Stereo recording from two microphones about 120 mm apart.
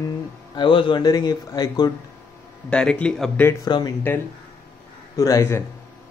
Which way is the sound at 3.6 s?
35° left (ahead or behind).